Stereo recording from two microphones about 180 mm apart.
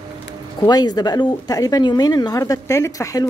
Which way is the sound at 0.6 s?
20° left (ahead or behind).